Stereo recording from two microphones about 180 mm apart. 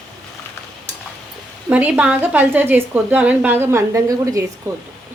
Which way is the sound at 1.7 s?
10° right (ahead or behind).